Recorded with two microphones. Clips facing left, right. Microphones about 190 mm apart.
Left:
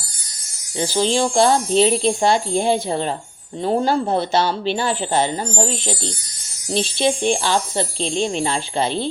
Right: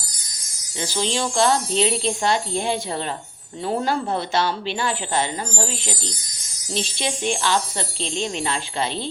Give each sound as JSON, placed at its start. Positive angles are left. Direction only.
{"t": 0.8, "sound": "speech", "side_deg": 40}
{"t": 3.6, "sound": "speech", "side_deg": 30}
{"t": 7.0, "sound": "speech", "side_deg": 35}